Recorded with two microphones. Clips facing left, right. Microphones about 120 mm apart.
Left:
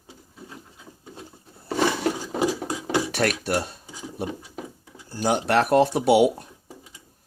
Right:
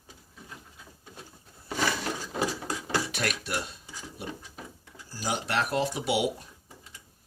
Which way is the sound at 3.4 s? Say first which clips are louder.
Left 8 dB; 45° left (ahead or behind).